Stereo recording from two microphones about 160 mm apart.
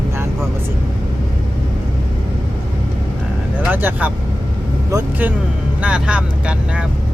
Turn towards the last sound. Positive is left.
turn(degrees=-5)  # may be behind; listen again after turning